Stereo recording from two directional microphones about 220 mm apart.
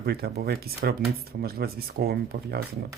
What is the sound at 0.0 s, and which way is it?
Speech, 45° right (ahead or behind).